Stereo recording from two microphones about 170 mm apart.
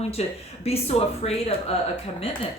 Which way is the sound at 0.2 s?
35° left (ahead or behind).